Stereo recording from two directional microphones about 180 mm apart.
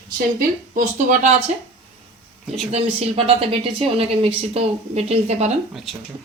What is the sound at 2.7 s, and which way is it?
Speech, 35° right (ahead or behind).